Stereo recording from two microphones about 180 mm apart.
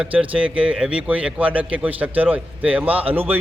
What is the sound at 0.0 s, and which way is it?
A man's voice, 5° right (ahead or behind).